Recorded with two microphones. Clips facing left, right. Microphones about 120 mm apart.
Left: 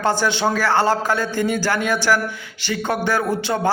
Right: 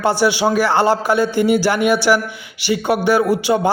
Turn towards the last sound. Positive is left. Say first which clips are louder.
# right 6 dB
turn(degrees=-15)  # may be behind; listen again after turning